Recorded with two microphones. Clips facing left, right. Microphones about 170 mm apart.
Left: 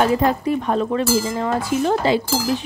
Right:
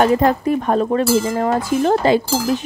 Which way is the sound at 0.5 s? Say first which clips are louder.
Right 3 dB; 45° right (ahead or behind).